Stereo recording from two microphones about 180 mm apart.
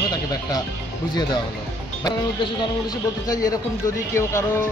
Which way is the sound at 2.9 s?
20° left (ahead or behind).